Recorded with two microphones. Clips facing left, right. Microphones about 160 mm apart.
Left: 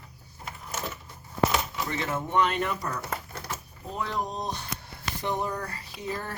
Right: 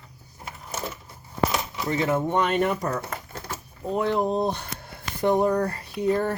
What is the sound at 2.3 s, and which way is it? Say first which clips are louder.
Speech: right 3 dB; 50° right (ahead or behind).